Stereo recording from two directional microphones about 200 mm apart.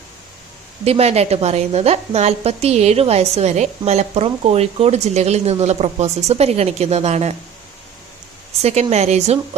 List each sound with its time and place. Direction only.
0.9 s a woman's voice: 30° right (ahead or behind)
8.6 s a woman's voice: 30° right (ahead or behind)